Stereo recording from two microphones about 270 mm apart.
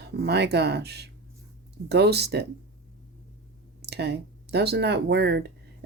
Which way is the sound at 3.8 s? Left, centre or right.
Right.